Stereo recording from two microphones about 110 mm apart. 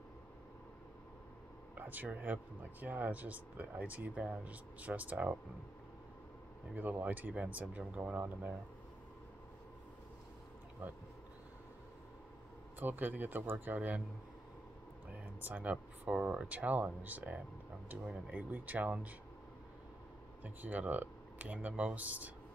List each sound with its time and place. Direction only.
1.8 s speech: 15° right (ahead or behind)
6.7 s speech: 15° right (ahead or behind)
10.8 s speech: 15° right (ahead or behind)
12.7 s speech: 15° right (ahead or behind)
15.4 s speech: 15° right (ahead or behind)
20.4 s speech: 15° right (ahead or behind)